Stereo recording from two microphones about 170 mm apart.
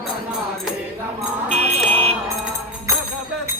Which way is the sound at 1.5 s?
40° right (ahead or behind).